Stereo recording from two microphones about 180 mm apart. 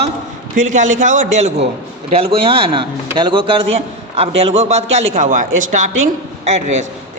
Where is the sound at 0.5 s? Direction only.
45° right (ahead or behind).